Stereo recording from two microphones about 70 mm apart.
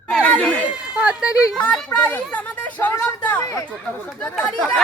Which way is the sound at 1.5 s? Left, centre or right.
Centre.